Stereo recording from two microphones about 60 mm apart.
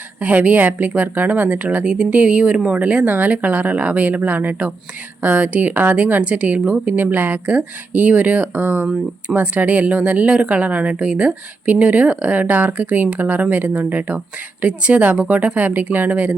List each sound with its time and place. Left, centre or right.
0.2 s speech: right
6.8 s speech: right